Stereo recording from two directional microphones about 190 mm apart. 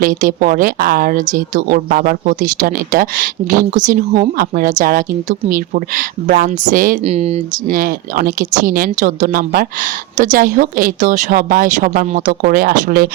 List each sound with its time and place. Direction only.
0.0 s speech: 45° right (ahead or behind)
7.8 s speech: 50° right (ahead or behind)